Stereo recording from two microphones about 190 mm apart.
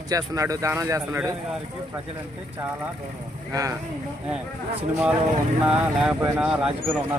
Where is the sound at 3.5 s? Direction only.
20° right (ahead or behind).